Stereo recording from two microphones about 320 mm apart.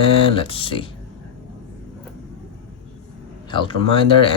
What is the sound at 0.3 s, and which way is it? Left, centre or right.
Speech, centre.